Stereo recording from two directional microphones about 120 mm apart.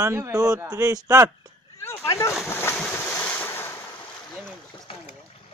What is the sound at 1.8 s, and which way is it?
Speech, 25° left (ahead or behind).